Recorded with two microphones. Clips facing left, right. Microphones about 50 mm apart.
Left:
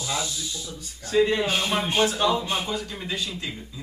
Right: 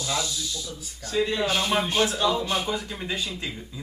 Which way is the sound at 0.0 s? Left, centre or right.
Left.